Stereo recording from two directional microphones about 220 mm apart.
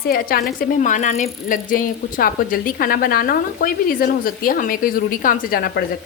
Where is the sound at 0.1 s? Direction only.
40° left (ahead or behind).